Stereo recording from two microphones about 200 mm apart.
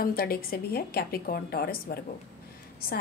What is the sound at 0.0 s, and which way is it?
A woman's voice, 45° left (ahead or behind).